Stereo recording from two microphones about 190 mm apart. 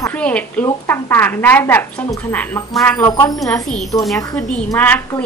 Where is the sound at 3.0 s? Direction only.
20° left (ahead or behind).